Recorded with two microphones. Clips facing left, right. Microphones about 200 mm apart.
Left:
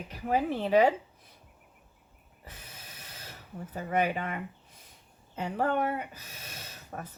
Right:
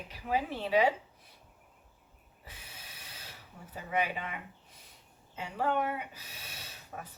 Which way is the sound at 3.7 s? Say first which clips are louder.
Left 4 dB; 50° left (ahead or behind).